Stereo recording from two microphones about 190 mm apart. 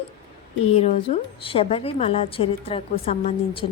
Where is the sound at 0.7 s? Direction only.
35° left (ahead or behind).